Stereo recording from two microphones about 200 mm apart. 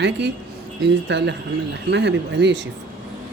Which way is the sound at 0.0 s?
60° right (ahead or behind).